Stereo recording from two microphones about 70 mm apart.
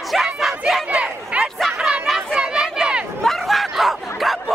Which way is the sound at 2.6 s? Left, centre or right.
Centre.